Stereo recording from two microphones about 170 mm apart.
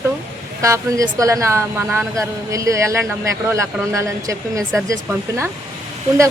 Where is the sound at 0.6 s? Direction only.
20° right (ahead or behind).